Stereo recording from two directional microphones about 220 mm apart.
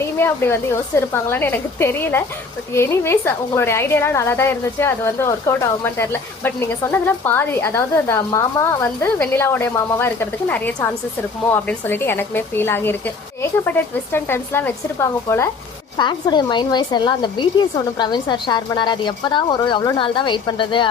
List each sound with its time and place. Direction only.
0.0 s a woman's voice: 10° left (ahead or behind)